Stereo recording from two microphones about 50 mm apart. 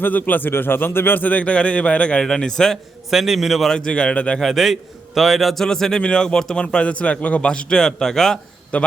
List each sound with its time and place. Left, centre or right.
0.0 s speech: left
1.2 s a man's voice: left
2.2 s speech: centre
3.1 s a man's voice: centre
3.7 s a man's voice: centre
4.4 s a man's voice: centre
5.5 s a man's voice: centre
8.7 s a man's voice: left